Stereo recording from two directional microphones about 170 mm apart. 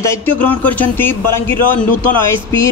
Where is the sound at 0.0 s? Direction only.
10° left (ahead or behind).